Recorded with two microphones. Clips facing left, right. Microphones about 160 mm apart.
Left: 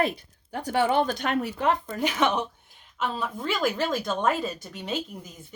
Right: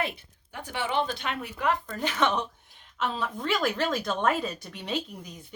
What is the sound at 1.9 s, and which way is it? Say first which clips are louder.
Speech: left 2 dB; 15° left (ahead or behind).